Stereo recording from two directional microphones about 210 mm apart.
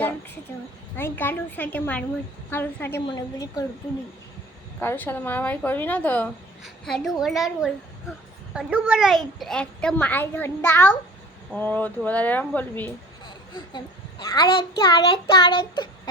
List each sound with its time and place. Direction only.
0.5 s a woman's voice: 15° left (ahead or behind)
4.8 s a woman's voice: 10° left (ahead or behind)
13.2 s a child's voice: 20° left (ahead or behind)